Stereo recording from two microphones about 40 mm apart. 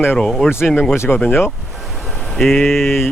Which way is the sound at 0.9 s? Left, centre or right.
Left.